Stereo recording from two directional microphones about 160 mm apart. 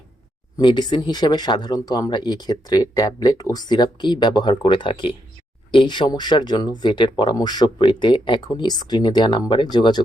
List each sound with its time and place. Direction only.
0.5 s speech: 25° left (ahead or behind)